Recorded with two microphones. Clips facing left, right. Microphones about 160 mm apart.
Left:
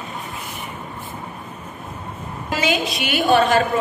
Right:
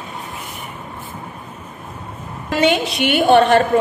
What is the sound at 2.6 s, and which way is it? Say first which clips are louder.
A woman's voice: right 6 dB; 70° right (ahead or behind).